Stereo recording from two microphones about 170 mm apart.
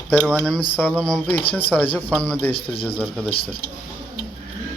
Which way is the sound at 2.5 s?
30° left (ahead or behind).